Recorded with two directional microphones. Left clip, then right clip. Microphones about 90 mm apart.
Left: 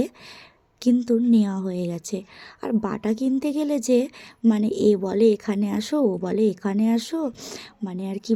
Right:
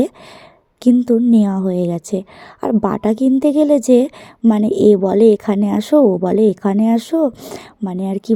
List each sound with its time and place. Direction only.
0.8 s a woman's voice: 50° right (ahead or behind)